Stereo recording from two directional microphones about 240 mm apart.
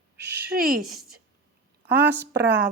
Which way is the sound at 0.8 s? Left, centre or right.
Centre.